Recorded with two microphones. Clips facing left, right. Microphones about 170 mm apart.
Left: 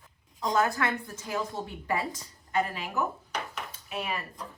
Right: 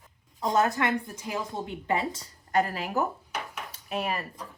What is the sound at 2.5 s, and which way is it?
Speech, 40° right (ahead or behind).